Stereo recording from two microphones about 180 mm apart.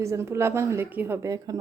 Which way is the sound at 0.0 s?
15° right (ahead or behind).